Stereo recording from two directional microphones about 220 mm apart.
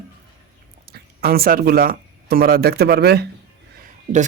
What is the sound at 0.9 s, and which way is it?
Speech, 45° right (ahead or behind).